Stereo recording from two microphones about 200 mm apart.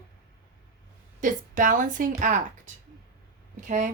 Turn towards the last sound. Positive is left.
turn(degrees=-40)  # may be behind; listen again after turning